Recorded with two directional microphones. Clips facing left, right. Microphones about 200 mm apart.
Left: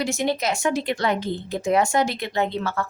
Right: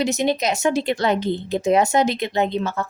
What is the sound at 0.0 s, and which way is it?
A woman's voice, 20° right (ahead or behind).